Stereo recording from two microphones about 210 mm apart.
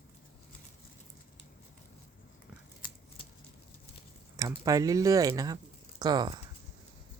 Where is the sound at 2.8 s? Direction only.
25° left (ahead or behind).